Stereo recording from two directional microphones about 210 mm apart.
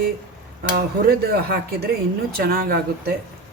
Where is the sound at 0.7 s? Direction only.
45° right (ahead or behind).